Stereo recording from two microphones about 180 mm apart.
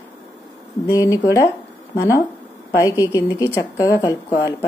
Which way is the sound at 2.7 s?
15° left (ahead or behind).